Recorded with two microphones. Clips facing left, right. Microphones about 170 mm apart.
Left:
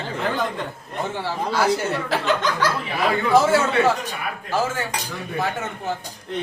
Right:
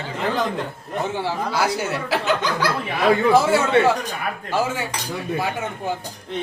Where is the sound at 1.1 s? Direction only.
10° right (ahead or behind).